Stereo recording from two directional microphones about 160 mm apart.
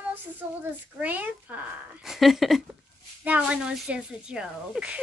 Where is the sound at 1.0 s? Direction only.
10° right (ahead or behind).